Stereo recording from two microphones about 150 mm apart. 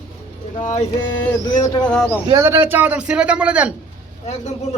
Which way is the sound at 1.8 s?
5° left (ahead or behind).